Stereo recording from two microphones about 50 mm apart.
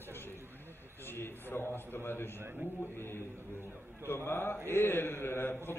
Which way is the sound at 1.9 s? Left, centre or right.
Left.